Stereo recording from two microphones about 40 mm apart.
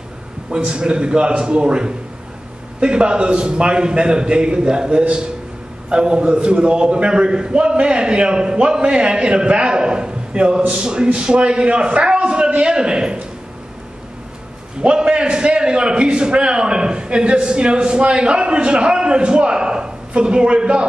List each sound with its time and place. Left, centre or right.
0.5 s a man's voice: right
14.8 s a man's voice: right